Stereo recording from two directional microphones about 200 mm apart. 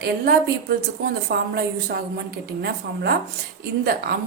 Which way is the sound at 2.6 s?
55° right (ahead or behind).